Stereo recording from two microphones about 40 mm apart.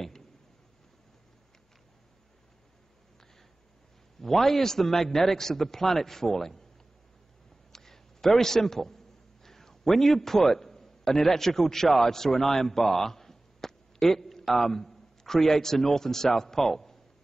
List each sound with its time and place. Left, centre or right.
4.2 s a man's voice: centre
7.7 s a sound: centre
14.5 s a man's voice: centre